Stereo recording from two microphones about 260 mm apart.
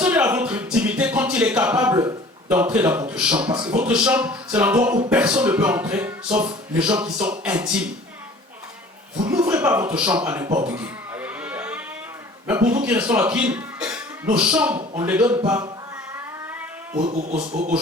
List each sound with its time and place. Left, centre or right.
0.0 s music: centre
3.5 s speech: centre
3.8 s music: centre
6.4 s speech: centre
9.2 s speech: centre
10.7 s sheep: centre
12.5 s speech: centre
14.4 s music: centre
14.8 s speech: centre
17.0 s speech: right